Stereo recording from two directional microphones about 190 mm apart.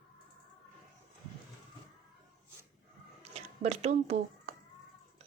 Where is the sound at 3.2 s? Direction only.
35° right (ahead or behind).